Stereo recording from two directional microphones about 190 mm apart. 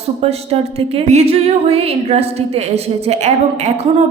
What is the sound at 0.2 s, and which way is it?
Speech, 35° right (ahead or behind).